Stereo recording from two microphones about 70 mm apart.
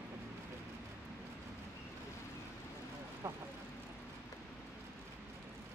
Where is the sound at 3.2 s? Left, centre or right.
Right.